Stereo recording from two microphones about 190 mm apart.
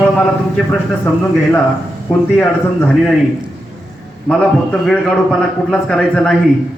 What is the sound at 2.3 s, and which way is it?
Speech, 10° left (ahead or behind).